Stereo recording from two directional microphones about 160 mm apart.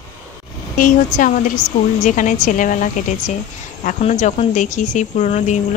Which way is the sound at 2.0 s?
55° left (ahead or behind).